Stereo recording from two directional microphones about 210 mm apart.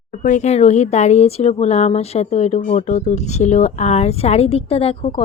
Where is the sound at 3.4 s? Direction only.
35° left (ahead or behind).